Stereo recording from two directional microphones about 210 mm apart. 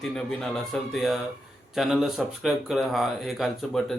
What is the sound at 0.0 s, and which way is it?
Speech, centre (ahead or behind).